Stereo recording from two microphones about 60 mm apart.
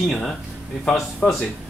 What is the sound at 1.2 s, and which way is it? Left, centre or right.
Speech, centre.